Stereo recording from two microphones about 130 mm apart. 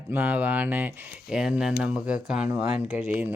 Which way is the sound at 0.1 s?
15° right (ahead or behind).